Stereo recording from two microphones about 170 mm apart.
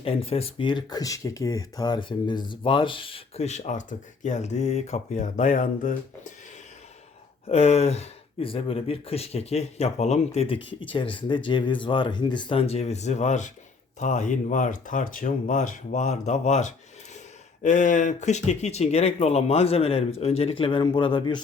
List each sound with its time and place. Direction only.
0.0 s speech: 35° left (ahead or behind); by 6.3 s 50° left (ahead or behind)
7.4 s speech: 35° left (ahead or behind)